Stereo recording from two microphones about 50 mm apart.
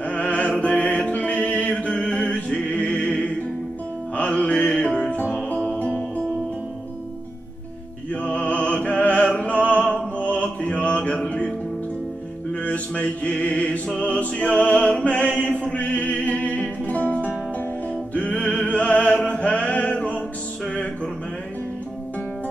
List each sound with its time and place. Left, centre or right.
0.0 s music: left
8.1 s music: left
10.2 s music: left
12.5 s mantra: left
13.9 s music: left